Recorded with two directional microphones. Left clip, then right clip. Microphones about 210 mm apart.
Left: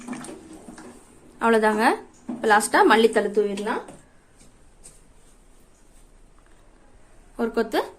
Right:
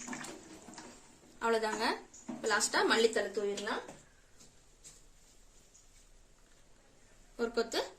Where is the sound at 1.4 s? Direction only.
40° left (ahead or behind).